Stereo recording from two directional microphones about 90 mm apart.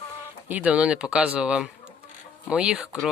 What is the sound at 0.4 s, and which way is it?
Speech, 15° right (ahead or behind).